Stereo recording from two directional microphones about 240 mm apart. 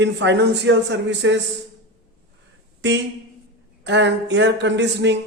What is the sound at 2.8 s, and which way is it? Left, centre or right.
A man's voice, right.